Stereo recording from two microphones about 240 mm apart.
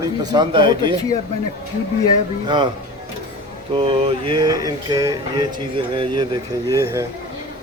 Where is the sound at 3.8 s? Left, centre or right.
Right.